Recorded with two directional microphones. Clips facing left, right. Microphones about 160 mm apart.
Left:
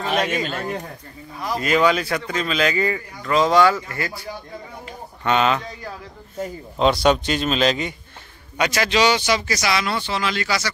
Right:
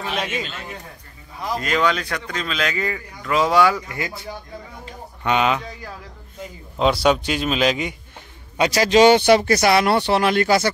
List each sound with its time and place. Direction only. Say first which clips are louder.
0.3 s a man's voice: left 5 dB; 50° left (ahead or behind)
1.5 s a man's voice: left 3 dB; 5° left (ahead or behind); by 5.6 s 10° right (ahead or behind)
6.8 s speech: even; 5° right (ahead or behind)
8.5 s speech: right 5 dB; 35° right (ahead or behind); by 10.7 s 50° right (ahead or behind)